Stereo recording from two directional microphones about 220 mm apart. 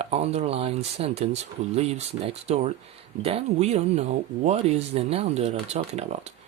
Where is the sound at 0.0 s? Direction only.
30° right (ahead or behind).